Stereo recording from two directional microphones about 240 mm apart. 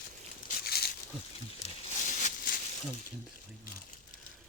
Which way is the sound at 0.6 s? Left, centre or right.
Left.